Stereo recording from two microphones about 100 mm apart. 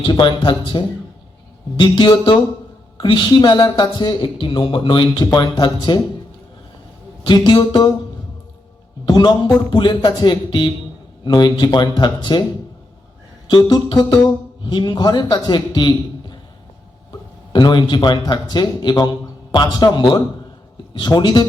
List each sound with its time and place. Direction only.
0.0 s a man's voice: 50° left (ahead or behind)
7.3 s a man's voice: 45° left (ahead or behind)
9.0 s a man's voice: 50° left (ahead or behind)
13.5 s a sound: 40° left (ahead or behind)
14.3 s a man's voice: 45° left (ahead or behind)
17.5 s a man's voice: 45° left (ahead or behind)